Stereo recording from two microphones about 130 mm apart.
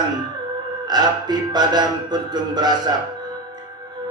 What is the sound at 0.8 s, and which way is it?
Music, 35° right (ahead or behind).